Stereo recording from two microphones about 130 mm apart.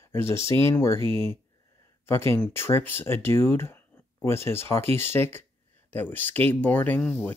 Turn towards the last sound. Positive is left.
turn(degrees=15)  # may be behind; listen again after turning